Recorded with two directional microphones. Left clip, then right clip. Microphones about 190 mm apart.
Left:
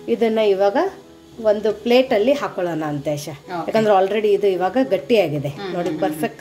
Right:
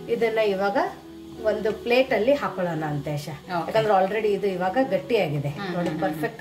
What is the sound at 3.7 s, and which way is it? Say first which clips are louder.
A woman's voice: left 5 dB; 40° left (ahead or behind).